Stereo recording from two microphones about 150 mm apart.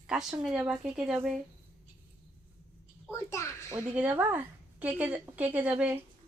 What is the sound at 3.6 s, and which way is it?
A woman's voice, 10° right (ahead or behind).